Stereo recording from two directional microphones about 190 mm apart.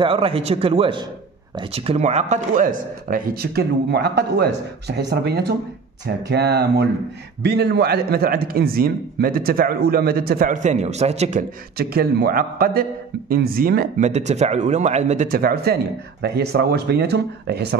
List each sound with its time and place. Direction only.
0.0 s a man's voice: 30° right (ahead or behind); by 5.0 s 60° right (ahead or behind)
6.2 s a man's voice: 60° right (ahead or behind)